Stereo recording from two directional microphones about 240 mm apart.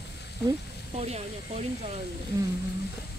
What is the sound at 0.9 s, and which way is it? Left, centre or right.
Speech, right.